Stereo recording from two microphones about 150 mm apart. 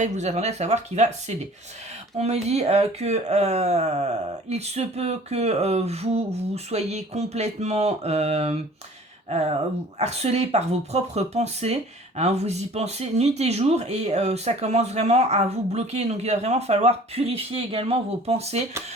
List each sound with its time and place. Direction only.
0.0 s speech: 50° right (ahead or behind)
2.1 s speech: 45° right (ahead or behind)
10.0 s speech: 45° right (ahead or behind)